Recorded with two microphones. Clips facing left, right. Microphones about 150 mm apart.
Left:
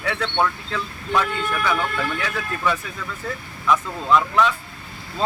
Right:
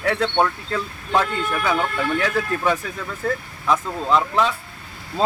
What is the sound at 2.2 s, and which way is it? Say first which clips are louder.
Speech: right 4 dB; 45° right (ahead or behind).